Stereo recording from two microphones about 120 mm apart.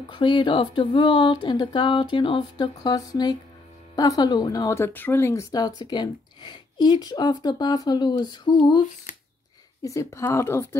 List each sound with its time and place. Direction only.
0.1 s speech: 40° left (ahead or behind)
9.1 s a sound: 90° left
9.8 s a woman's voice: 25° left (ahead or behind)